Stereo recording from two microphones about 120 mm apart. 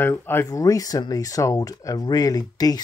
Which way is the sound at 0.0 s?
20° left (ahead or behind).